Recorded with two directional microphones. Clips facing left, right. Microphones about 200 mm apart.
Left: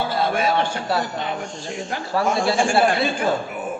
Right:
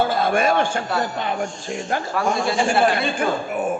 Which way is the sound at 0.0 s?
50° right (ahead or behind).